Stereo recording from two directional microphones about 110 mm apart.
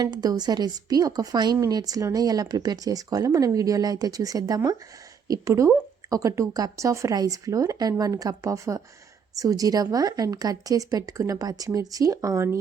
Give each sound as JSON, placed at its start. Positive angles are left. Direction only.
{"t": 0.0, "sound": "a woman's voice", "side_deg": -35}